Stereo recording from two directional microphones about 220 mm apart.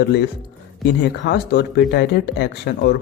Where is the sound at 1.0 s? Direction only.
50° left (ahead or behind).